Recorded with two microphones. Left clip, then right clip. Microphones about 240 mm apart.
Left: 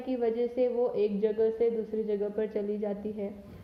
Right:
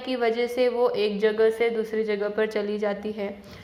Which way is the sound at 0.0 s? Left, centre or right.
Centre.